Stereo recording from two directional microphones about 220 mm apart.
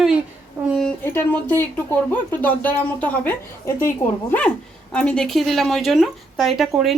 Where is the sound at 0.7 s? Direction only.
5° left (ahead or behind).